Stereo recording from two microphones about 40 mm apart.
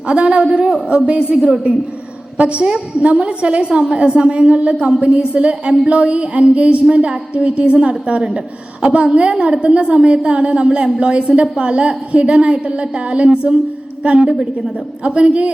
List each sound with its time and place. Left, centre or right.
0.1 s a woman's voice: right